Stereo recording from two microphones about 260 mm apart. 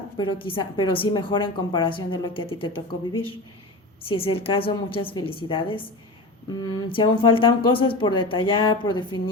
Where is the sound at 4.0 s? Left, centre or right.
Left.